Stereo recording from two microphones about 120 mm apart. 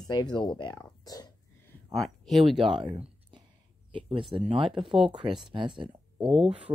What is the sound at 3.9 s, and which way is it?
Speech, 45° right (ahead or behind).